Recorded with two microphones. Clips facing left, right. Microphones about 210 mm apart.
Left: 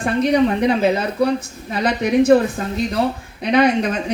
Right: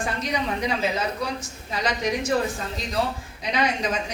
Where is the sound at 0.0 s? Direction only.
60° left (ahead or behind).